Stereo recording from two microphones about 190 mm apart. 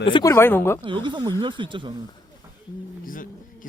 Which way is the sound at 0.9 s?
25° right (ahead or behind).